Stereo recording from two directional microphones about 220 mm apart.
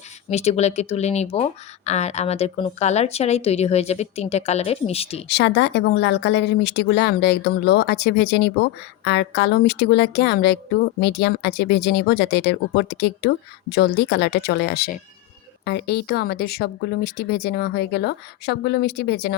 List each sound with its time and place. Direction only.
0.3 s speech: 30° left (ahead or behind)
5.3 s speech: 50° left (ahead or behind)